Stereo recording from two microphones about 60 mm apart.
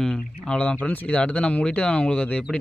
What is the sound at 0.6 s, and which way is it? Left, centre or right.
A man's voice, left.